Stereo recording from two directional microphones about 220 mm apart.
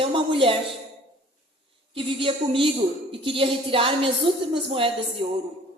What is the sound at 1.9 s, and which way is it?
A woman's voice, 25° right (ahead or behind).